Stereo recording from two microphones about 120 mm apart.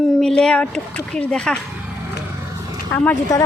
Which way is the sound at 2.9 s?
15° left (ahead or behind).